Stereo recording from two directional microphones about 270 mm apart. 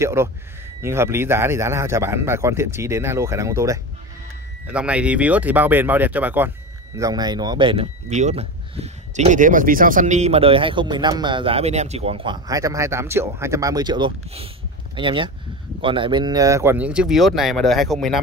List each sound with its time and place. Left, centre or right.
0.0 s speech: centre